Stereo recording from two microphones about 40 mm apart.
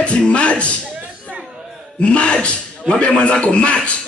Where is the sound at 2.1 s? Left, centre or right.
Left.